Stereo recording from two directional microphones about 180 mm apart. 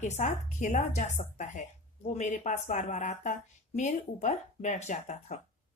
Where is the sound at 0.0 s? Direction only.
40° left (ahead or behind).